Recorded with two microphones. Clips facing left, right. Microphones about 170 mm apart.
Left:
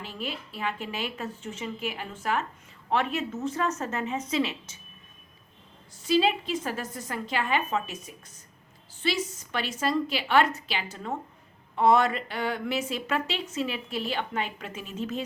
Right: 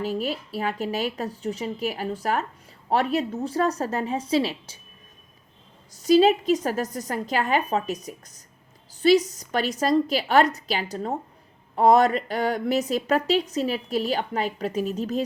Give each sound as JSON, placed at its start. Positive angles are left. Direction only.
{"t": 0.0, "sound": "speech", "side_deg": -40}
{"t": 5.9, "sound": "speech", "side_deg": -40}